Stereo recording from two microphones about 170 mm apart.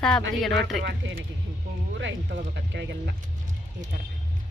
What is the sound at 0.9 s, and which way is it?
Speech, 80° right.